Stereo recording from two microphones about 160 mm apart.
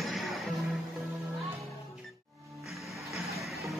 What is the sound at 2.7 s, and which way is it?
Music, centre (ahead or behind).